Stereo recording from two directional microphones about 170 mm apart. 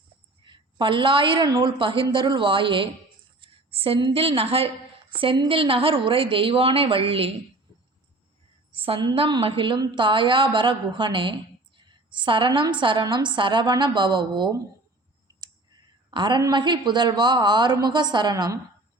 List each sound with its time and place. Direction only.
0.4 s a woman's voice: 30° right (ahead or behind)
8.7 s a woman's voice: 35° right (ahead or behind)
16.0 s a woman's voice: 25° right (ahead or behind)